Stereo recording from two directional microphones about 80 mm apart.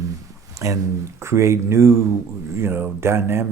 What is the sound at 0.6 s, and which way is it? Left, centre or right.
Speech, right.